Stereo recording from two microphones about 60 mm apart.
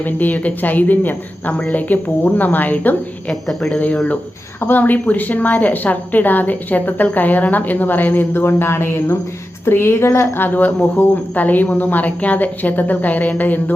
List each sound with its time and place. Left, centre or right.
0.0 s a woman's voice: left
3.4 s speech: centre
3.8 s a woman's voice: left
10.4 s a woman's voice: left